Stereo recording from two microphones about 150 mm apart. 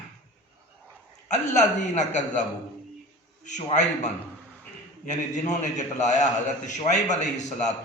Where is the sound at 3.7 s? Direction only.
50° left (ahead or behind).